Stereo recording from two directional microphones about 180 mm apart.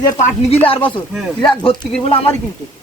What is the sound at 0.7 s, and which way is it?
Speech, 30° left (ahead or behind).